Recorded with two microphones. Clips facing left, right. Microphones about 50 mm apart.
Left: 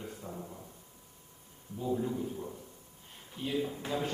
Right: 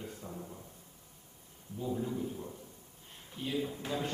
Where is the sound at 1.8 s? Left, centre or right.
Centre.